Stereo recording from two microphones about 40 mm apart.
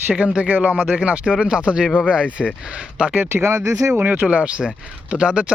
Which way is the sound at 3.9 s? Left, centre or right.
Right.